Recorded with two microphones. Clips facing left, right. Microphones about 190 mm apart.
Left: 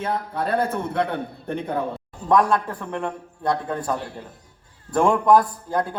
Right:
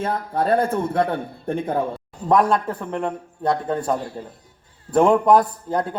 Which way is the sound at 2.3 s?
25° right (ahead or behind).